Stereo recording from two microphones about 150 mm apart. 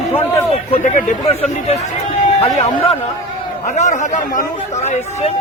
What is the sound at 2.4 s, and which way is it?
Speech, 40° left (ahead or behind).